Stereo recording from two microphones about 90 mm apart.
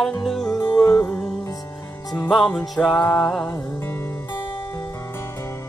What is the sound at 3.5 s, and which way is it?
Music, 25° left (ahead or behind).